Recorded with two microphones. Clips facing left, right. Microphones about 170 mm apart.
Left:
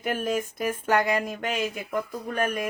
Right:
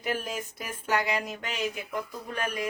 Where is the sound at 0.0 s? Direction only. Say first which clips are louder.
Left 5 dB; 50° left (ahead or behind).